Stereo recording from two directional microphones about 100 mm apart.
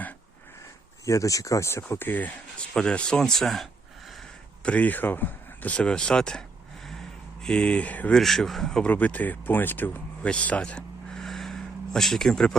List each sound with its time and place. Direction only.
1.0 s speech: 30° left (ahead or behind); by 3.7 s 5° left (ahead or behind)
4.6 s speech: 15° left (ahead or behind)
7.4 s speech: 10° left (ahead or behind)
8.2 s speech: centre (ahead or behind)
8.9 s speech: 15° left (ahead or behind)